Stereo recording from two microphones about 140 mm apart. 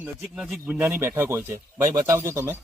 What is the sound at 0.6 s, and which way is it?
Speech, 15° right (ahead or behind).